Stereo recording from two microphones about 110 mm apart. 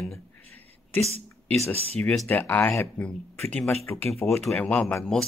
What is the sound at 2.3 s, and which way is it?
Speech, 20° left (ahead or behind).